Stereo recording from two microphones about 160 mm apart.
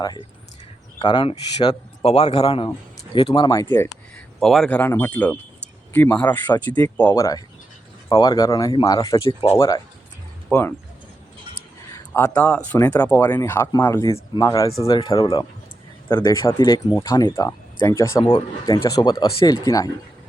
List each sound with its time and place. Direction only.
1.0 s speech: 30° left (ahead or behind)
2.0 s a man's voice: 40° left (ahead or behind)
3.5 s speech: 15° left (ahead or behind)
4.4 s speech: centre (ahead or behind); by 9.1 s 20° left (ahead or behind)
10.5 s speech: 10° left (ahead or behind)
12.1 s speech: 15° left (ahead or behind)